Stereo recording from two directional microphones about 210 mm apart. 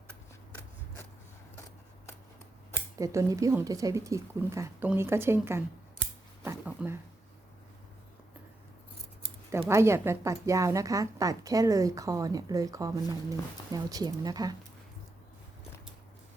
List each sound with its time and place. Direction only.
3.0 s a woman's voice: 15° right (ahead or behind)
6.4 s a sound: 10° right (ahead or behind)
9.5 s a woman's voice: 15° right (ahead or behind)